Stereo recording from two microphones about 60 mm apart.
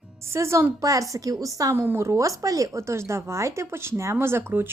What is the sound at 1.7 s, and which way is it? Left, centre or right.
Speech, right.